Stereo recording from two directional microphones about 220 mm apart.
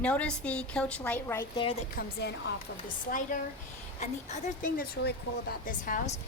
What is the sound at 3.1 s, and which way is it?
A woman's voice, 35° left (ahead or behind).